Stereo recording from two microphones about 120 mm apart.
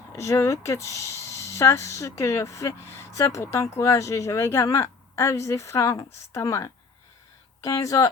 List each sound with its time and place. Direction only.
0.2 s speech: 25° left (ahead or behind)